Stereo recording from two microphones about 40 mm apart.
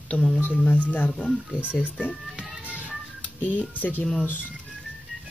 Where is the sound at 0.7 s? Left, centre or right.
Left.